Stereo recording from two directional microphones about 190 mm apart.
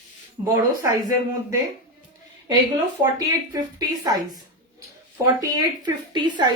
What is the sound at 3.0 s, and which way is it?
A woman's voice, 20° right (ahead or behind).